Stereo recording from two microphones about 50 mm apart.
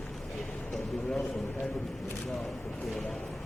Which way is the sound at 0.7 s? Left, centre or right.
Centre.